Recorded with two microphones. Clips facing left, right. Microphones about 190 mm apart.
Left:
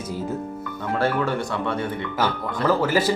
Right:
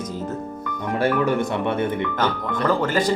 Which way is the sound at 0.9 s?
20° right (ahead or behind).